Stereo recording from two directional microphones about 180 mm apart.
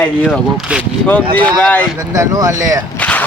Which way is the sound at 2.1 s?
20° right (ahead or behind).